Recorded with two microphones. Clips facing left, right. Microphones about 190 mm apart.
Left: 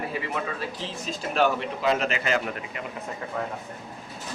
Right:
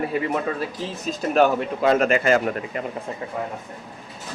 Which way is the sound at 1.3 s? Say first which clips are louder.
Right 5 dB; 45° right (ahead or behind).